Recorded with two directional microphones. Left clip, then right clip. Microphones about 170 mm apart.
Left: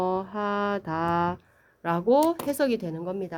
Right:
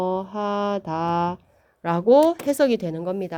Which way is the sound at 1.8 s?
30° right (ahead or behind).